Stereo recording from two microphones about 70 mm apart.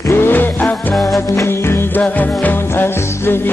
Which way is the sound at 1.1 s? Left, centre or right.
Left.